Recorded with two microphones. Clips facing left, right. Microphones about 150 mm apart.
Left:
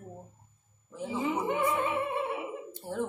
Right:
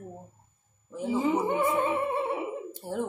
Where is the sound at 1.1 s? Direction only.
30° right (ahead or behind).